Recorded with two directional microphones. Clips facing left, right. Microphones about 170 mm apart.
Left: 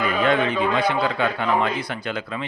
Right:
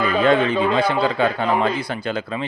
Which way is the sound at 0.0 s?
30° right (ahead or behind).